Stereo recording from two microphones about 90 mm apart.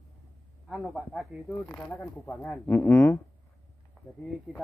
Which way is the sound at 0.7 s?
5° right (ahead or behind).